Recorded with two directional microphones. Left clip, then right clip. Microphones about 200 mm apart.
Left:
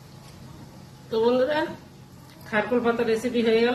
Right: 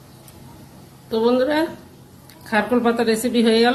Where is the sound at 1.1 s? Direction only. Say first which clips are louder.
Right 4 dB; 35° right (ahead or behind).